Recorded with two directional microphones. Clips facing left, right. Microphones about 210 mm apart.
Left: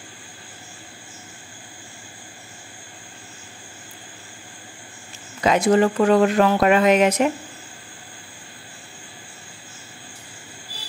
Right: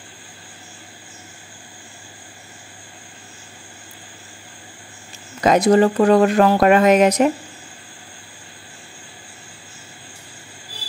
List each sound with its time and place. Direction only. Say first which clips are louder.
5.4 s speech: right 3 dB; 40° right (ahead or behind)